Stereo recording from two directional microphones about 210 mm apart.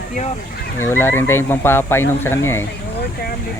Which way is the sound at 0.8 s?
10° left (ahead or behind).